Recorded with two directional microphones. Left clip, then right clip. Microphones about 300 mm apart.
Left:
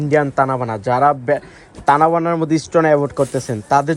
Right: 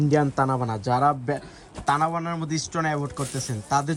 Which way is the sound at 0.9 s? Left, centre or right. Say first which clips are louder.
Left 8 dB; centre.